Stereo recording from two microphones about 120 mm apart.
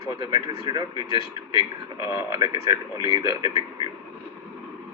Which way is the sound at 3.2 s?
50° left (ahead or behind).